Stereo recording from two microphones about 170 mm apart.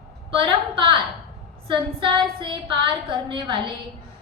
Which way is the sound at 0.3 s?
30° right (ahead or behind).